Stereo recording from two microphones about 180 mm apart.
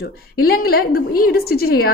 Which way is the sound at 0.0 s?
60° left (ahead or behind).